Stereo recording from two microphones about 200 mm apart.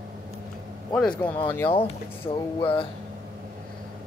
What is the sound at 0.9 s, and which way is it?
Speech, 5° left (ahead or behind).